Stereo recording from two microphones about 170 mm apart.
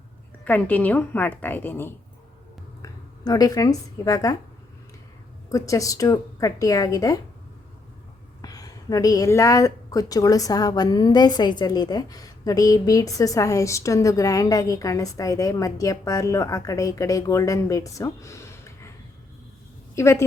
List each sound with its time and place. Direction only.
0.4 s a woman's voice: 10° left (ahead or behind)
5.5 s a woman's voice: 20° left (ahead or behind)
8.4 s a woman's voice: 20° left (ahead or behind)
20.0 s a woman's voice: 15° left (ahead or behind)